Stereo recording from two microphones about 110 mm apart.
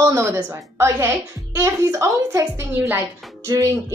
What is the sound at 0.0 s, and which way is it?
A woman's voice, 25° right (ahead or behind).